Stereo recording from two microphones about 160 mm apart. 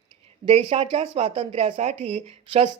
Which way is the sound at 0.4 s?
35° right (ahead or behind).